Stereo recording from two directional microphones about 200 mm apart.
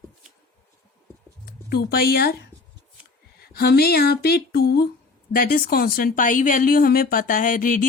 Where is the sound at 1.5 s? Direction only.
50° left (ahead or behind).